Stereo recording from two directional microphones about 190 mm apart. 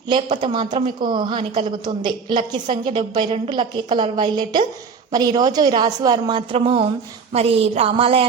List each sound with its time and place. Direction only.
0.1 s a woman's voice: 25° right (ahead or behind)